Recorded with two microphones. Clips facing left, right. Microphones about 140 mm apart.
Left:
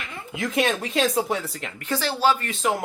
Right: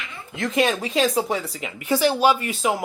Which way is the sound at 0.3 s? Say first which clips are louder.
Right 2 dB; centre (ahead or behind).